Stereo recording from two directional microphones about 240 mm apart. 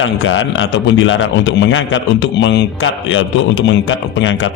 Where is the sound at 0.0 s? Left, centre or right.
Left.